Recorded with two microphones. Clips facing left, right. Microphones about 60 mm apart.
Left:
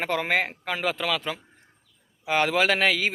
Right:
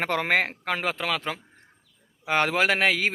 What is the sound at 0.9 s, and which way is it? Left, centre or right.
Speech, right.